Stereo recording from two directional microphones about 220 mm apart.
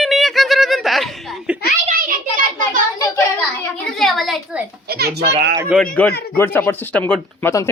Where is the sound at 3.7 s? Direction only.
Centre (ahead or behind).